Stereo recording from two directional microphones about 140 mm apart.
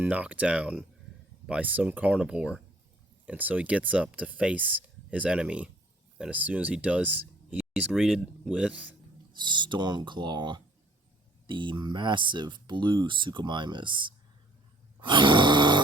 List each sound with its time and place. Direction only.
0.0 s speech: 10° right (ahead or behind)
9.4 s speech: 35° right (ahead or behind)